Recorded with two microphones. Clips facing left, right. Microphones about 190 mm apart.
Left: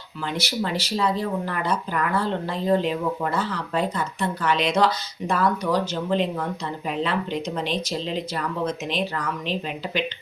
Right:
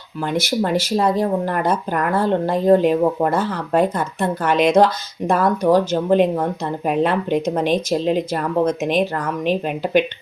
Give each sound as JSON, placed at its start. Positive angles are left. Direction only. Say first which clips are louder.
{"t": 0.3, "sound": "speech", "louder": "right 7 dB", "side_deg": -50}